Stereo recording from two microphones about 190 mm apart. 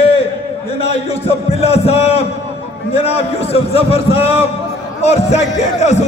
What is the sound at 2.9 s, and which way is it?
A man's voice, 30° left (ahead or behind).